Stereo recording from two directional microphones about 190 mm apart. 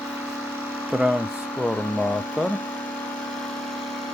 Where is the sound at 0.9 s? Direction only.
5° right (ahead or behind).